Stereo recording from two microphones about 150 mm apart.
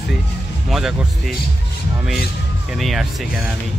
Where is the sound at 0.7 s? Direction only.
Centre (ahead or behind).